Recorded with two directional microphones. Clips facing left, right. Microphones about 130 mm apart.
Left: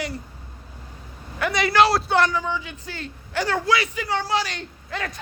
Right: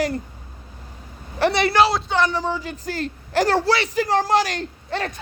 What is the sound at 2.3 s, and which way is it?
A woman's voice, 35° right (ahead or behind).